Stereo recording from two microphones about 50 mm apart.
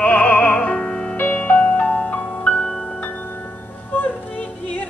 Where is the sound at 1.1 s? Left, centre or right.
Left.